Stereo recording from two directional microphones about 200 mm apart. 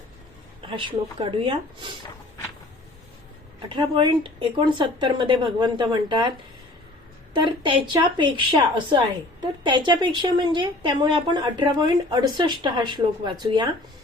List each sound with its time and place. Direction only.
0.7 s a woman's voice: 25° right (ahead or behind)
3.7 s a woman's voice: 25° right (ahead or behind)
7.3 s a woman's voice: 25° right (ahead or behind)